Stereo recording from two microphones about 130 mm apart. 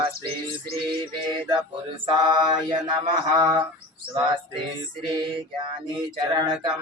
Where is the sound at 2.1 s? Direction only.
40° right (ahead or behind).